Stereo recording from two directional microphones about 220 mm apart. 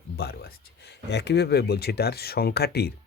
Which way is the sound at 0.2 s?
45° left (ahead or behind).